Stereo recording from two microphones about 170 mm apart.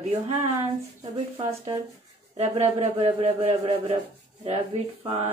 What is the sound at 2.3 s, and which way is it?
A man's voice, 40° right (ahead or behind).